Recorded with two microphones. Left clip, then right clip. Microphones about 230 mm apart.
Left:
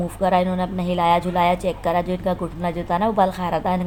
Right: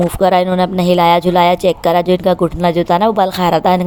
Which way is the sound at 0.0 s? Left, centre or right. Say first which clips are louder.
Right 8 dB; right.